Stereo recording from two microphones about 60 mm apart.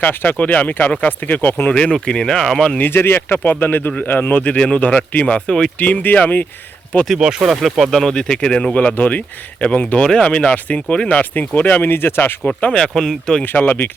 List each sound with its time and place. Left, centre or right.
0.0 s speech: left
1.8 s speech: centre
2.7 s speech: left; by 5.7 s centre
5.8 s speech: left
7.2 s speech: centre
7.5 s speech: centre; by 12.4 s left
12.5 s speech: centre
13.4 s speech: left